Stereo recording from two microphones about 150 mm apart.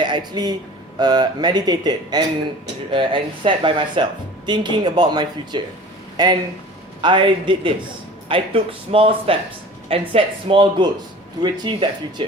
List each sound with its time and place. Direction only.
0.0 s a man's voice: 30° right (ahead or behind)